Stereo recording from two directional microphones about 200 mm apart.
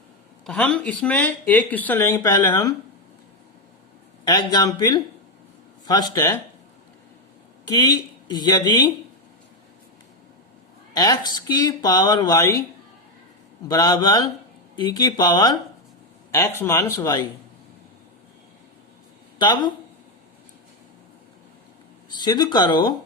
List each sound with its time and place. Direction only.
0.4 s speech: 5° left (ahead or behind)
4.3 s speech: 20° left (ahead or behind)
7.7 s speech: 20° left (ahead or behind)
10.9 s speech: 20° left (ahead or behind)
13.7 s speech: 20° left (ahead or behind)
19.4 s speech: 20° left (ahead or behind)
22.1 s speech: 20° left (ahead or behind)